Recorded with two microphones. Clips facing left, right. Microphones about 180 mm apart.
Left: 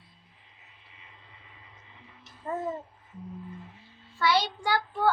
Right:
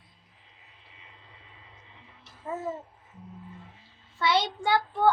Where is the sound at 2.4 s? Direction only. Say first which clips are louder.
Left 1 dB; 5° right (ahead or behind).